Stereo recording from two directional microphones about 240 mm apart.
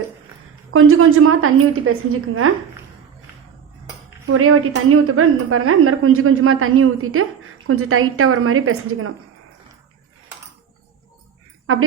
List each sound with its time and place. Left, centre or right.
0.7 s a woman's voice: right
4.3 s a woman's voice: right